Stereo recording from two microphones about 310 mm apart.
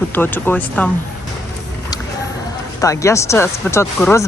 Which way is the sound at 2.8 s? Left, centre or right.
Centre.